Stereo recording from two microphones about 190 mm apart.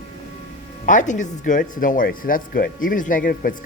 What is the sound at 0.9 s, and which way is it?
Speech, 40° left (ahead or behind).